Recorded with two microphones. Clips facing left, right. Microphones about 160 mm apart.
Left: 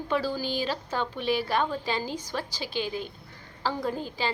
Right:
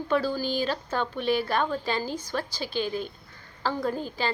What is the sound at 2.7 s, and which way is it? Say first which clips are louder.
Speech: right 2 dB; 45° right (ahead or behind).